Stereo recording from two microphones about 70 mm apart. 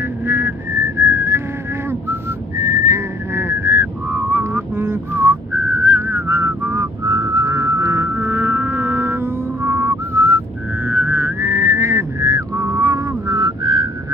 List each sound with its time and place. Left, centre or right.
0.3 s whistling: right
7.1 s music: right
8.1 s music: right
10.9 s a sound: right
13.3 s whistling: right